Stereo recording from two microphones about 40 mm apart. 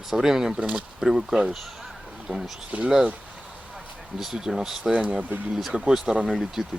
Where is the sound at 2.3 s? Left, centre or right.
Right.